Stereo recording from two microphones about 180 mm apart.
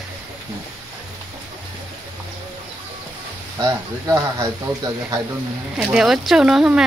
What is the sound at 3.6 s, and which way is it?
Speech, 15° right (ahead or behind).